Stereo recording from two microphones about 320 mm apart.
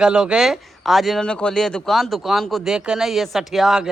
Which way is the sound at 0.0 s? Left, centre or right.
Centre.